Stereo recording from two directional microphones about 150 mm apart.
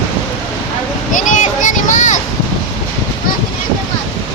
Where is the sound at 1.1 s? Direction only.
60° left (ahead or behind).